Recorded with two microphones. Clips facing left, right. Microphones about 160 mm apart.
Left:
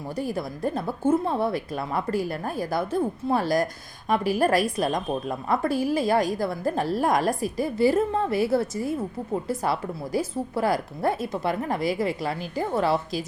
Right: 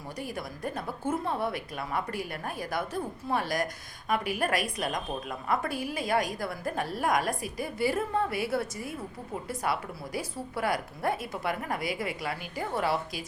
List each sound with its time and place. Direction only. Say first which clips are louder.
0.2 s a woman's voice: left 8 dB; 30° left (ahead or behind)
10.2 s a woman's voice: left 7 dB; 25° left (ahead or behind)